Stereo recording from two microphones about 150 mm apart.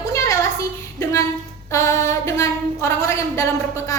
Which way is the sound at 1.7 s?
20° left (ahead or behind).